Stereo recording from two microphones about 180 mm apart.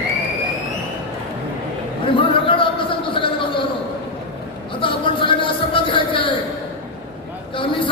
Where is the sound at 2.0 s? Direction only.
30° left (ahead or behind).